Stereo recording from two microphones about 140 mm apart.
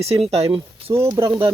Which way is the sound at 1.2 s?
30° right (ahead or behind).